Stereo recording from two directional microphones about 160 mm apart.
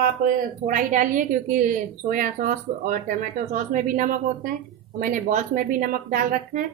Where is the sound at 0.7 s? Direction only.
55° right (ahead or behind).